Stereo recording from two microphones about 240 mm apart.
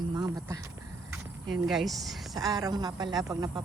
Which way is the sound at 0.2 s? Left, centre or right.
Centre.